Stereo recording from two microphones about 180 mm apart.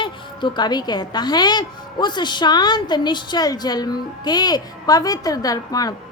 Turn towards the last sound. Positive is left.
turn(degrees=20)  # may be behind; listen again after turning